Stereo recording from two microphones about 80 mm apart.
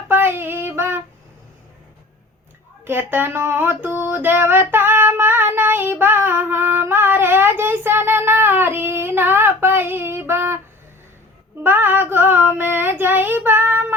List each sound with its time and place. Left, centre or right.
0.1 s female singing: right
2.8 s a sound: right
11.6 s female singing: right